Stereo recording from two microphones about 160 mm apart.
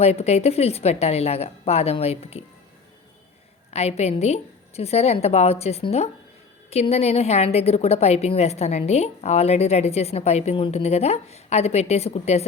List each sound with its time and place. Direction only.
0.0 s a woman's voice: 40° left (ahead or behind)
3.7 s a woman's voice: 40° left (ahead or behind)